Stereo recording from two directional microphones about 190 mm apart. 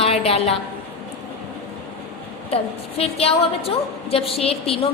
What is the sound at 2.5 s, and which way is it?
A woman's voice, 30° left (ahead or behind).